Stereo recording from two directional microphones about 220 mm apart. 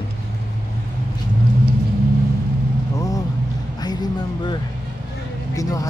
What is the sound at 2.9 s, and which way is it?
Vehicle, 15° left (ahead or behind).